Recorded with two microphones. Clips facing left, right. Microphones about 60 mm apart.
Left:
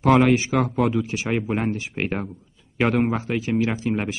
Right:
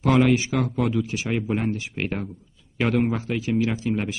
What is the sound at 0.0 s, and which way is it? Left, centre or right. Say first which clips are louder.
A man's voice: left 2 dB; left.